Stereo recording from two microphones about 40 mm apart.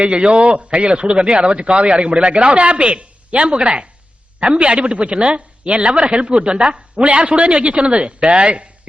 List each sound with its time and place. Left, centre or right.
0.0 s a man's voice: right